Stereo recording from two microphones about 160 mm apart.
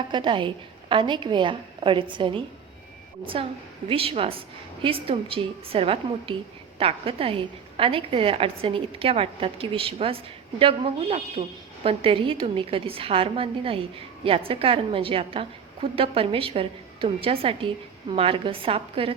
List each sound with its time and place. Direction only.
0.1 s a woman's voice: 30° right (ahead or behind)
3.8 s a woman's voice: 35° right (ahead or behind)